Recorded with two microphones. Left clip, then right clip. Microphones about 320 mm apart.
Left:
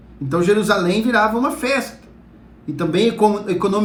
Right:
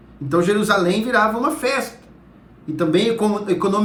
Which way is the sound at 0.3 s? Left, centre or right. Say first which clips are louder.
Left 1 dB; centre.